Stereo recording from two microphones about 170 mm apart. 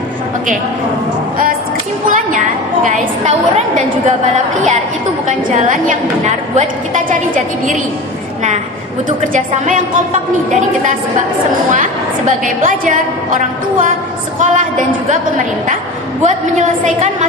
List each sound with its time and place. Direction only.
2.0 s a sound: 50° right (ahead or behind)
2.8 s a woman's voice: 50° right (ahead or behind)
5.5 s a woman's voice: 50° right (ahead or behind)
9.0 s a woman's voice: 50° right (ahead or behind)
12.6 s a woman's voice: 50° right (ahead or behind)
16.2 s a woman's voice: 45° right (ahead or behind)